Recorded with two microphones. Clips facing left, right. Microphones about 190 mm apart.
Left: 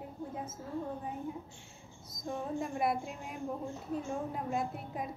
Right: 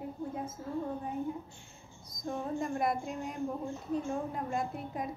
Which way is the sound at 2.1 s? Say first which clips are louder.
Right 1 dB; 5° left (ahead or behind).